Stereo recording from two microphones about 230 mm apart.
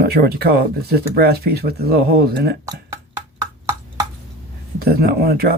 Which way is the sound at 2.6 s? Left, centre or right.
Centre.